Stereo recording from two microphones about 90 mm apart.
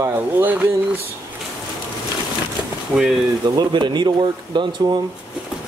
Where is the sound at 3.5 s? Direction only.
55° right (ahead or behind).